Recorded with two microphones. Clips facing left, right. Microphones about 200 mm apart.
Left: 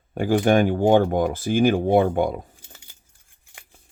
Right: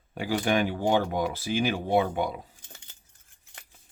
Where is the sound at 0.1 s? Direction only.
50° left (ahead or behind).